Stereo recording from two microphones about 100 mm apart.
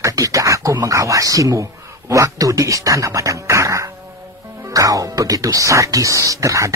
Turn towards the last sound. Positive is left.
turn(degrees=-30)  # may be behind; listen again after turning